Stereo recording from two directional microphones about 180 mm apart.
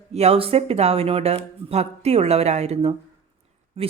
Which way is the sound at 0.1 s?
35° right (ahead or behind).